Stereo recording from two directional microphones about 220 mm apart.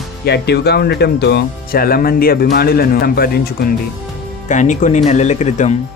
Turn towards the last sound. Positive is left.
turn(degrees=30)  # may be behind; listen again after turning